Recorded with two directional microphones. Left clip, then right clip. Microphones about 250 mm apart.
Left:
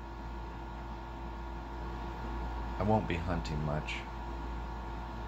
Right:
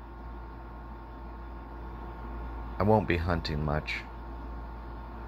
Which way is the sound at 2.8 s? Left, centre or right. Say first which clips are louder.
Right 6 dB; right.